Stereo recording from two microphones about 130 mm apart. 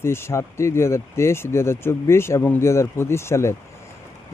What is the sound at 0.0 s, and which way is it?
Speech, 20° left (ahead or behind).